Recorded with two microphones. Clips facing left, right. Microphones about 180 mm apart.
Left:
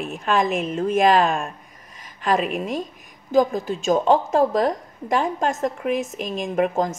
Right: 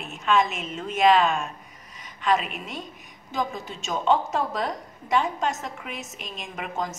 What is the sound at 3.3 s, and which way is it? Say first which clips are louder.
A woman's voice: left 11 dB; 40° left (ahead or behind).